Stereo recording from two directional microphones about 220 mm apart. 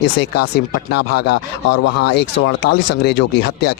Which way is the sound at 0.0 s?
50° left (ahead or behind).